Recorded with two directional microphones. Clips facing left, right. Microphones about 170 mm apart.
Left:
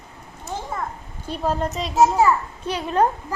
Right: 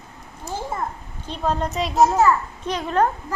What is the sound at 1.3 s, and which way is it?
A child's voice, 5° left (ahead or behind).